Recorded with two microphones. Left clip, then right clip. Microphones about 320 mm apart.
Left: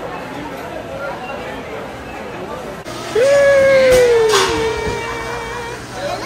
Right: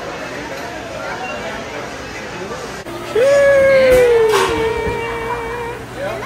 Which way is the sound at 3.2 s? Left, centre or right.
Centre.